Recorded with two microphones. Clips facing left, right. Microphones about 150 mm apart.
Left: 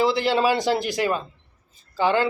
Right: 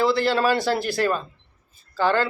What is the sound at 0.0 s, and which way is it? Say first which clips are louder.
A man's voice: even; 15° left (ahead or behind).